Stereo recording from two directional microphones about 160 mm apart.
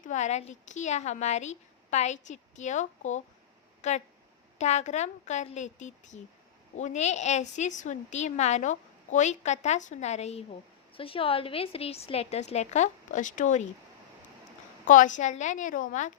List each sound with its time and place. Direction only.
0.0 s a woman's voice: 50° left (ahead or behind)
14.8 s a woman's voice: 55° left (ahead or behind)